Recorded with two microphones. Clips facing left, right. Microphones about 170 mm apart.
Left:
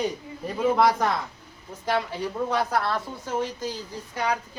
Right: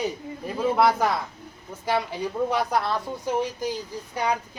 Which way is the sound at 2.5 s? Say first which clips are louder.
Even; 15° right (ahead or behind).